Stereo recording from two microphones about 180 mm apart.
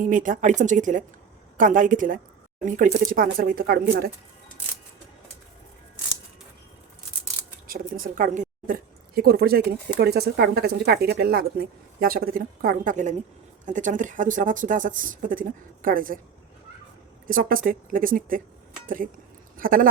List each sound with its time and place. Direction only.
0.0 s speech: 45° right (ahead or behind)
7.7 s a woman's voice: 50° right (ahead or behind)
17.2 s speech: 50° right (ahead or behind)
19.5 s speech: 50° right (ahead or behind)